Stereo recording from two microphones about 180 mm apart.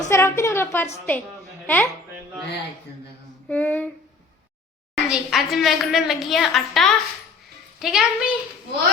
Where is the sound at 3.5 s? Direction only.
10° left (ahead or behind).